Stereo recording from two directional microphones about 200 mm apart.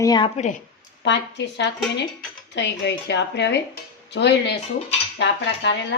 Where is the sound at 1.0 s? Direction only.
60° left (ahead or behind).